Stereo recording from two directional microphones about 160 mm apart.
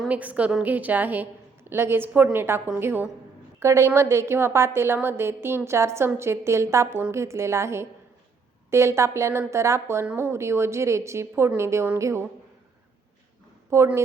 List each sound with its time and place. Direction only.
0.1 s a woman's voice: 10° right (ahead or behind)
13.7 s a woman's voice: 15° right (ahead or behind)